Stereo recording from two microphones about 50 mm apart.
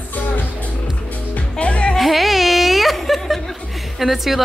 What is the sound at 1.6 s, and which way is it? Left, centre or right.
Music, left.